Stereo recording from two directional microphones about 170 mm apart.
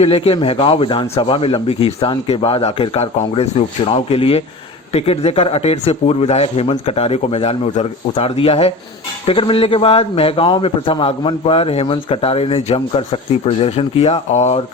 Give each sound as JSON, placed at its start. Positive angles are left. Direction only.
{"t": 0.0, "sound": "speech", "side_deg": 35}